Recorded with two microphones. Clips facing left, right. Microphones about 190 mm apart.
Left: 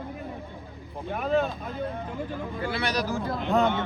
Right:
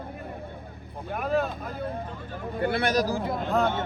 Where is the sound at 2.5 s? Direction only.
55° right (ahead or behind); by 3.2 s 40° right (ahead or behind).